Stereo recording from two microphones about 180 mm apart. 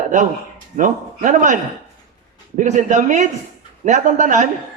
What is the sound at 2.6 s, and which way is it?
A man's voice, 40° right (ahead or behind).